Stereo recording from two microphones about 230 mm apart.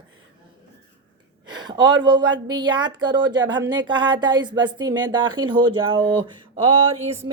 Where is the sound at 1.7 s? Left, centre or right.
Centre.